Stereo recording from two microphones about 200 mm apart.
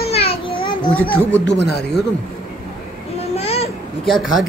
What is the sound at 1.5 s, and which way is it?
Speech, 55° left (ahead or behind).